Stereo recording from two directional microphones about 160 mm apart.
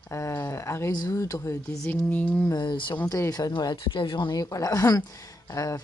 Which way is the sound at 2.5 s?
25° left (ahead or behind).